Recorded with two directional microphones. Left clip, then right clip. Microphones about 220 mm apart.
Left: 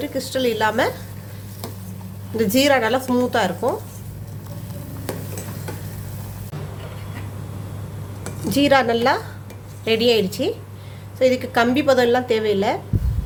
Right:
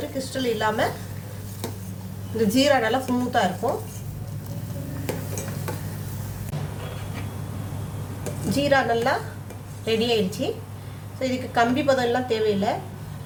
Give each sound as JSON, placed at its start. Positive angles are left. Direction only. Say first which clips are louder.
{"t": 0.2, "sound": "speech", "louder": "left 5 dB", "side_deg": 45}
{"t": 2.4, "sound": "speech", "louder": "left 3 dB", "side_deg": 45}
{"t": 8.4, "sound": "a woman's voice", "louder": "left 4 dB", "side_deg": 40}